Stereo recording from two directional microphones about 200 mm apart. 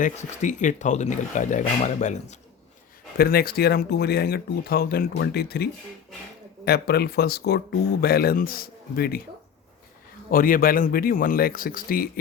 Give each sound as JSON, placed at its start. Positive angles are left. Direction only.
{"t": 0.0, "sound": "speech", "side_deg": 40}
{"t": 3.2, "sound": "speech", "side_deg": 50}
{"t": 6.7, "sound": "speech", "side_deg": 55}
{"t": 10.3, "sound": "speech", "side_deg": 45}